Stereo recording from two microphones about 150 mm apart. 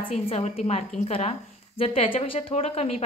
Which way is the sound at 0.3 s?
45° left (ahead or behind).